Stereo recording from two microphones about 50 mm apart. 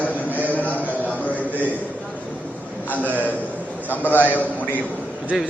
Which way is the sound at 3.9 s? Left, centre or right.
Left.